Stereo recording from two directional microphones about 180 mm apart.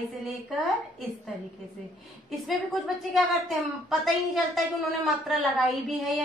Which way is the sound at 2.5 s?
Centre (ahead or behind).